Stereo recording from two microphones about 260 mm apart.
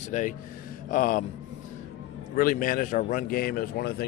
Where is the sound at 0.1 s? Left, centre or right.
Left.